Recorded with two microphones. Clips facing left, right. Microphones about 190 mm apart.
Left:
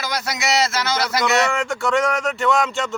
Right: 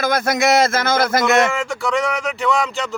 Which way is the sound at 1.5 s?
Centre (ahead or behind).